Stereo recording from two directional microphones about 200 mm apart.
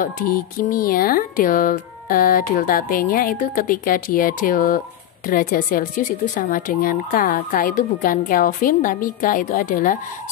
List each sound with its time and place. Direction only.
0.0 s speech: 45° left (ahead or behind)